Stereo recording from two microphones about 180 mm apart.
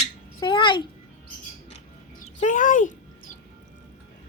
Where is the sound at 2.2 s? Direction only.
45° left (ahead or behind).